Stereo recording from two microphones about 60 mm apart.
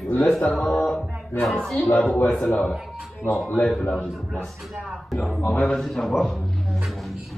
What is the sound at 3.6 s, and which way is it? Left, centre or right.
Speech, centre.